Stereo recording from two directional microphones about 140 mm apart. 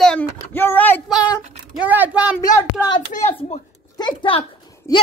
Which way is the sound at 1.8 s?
10° right (ahead or behind).